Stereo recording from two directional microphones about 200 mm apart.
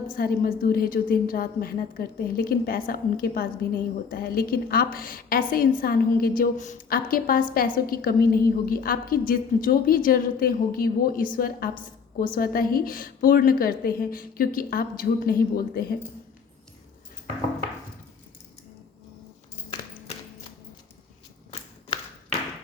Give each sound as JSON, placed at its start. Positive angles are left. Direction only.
{"t": 0.2, "sound": "a woman's voice", "side_deg": 45}